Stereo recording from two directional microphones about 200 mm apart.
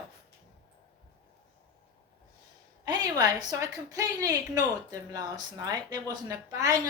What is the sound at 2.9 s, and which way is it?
A woman's voice, 20° right (ahead or behind).